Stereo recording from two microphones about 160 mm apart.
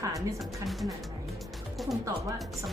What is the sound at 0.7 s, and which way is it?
Speech, centre (ahead or behind).